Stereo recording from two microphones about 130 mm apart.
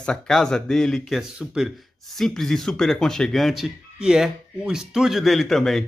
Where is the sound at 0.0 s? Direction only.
5° left (ahead or behind).